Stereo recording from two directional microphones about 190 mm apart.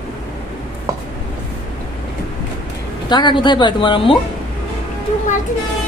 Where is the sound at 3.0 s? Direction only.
25° left (ahead or behind).